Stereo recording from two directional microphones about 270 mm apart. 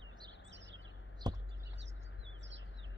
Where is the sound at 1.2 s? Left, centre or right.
Centre.